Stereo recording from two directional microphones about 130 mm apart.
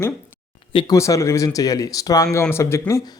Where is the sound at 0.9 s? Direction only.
25° left (ahead or behind).